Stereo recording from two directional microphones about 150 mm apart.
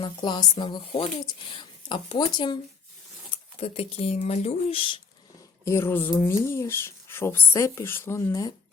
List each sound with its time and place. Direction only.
0.0 s speech: 30° left (ahead or behind)
5.6 s speech: 15° left (ahead or behind)